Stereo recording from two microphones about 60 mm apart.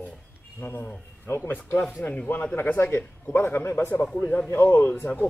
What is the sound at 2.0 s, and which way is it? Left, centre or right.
Speech, left.